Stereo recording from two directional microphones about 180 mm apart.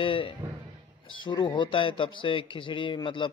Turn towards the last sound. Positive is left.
turn(degrees=25)  # may be behind; listen again after turning